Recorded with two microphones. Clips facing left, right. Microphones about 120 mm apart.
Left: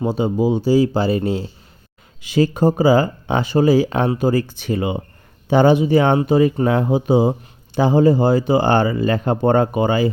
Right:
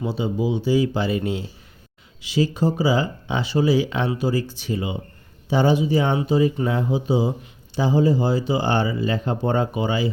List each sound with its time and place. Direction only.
0.0 s speech: 45° left (ahead or behind)
2.2 s speech: 50° left (ahead or behind)